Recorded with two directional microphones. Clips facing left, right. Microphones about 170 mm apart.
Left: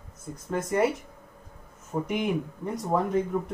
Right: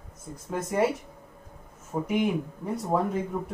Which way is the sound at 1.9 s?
5° right (ahead or behind).